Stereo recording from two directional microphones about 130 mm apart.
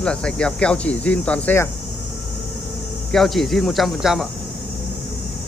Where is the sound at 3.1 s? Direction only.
Centre (ahead or behind).